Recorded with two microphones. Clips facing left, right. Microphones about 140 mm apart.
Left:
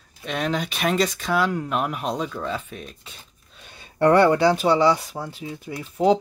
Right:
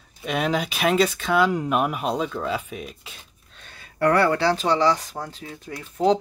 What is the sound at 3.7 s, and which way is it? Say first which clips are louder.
Speech: left 3 dB; 25° left (ahead or behind).